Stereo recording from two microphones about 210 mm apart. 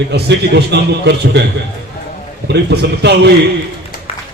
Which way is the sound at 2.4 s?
55° right (ahead or behind).